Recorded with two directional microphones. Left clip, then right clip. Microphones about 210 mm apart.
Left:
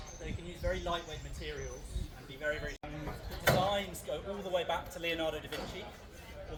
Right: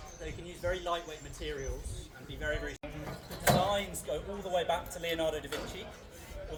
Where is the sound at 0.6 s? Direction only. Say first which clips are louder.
Right 2 dB; 35° right (ahead or behind).